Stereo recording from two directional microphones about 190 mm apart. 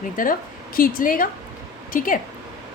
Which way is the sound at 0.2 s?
45° left (ahead or behind).